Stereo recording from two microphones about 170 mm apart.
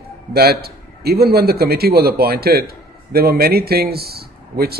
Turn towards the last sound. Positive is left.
turn(degrees=-65)  # may be behind; listen again after turning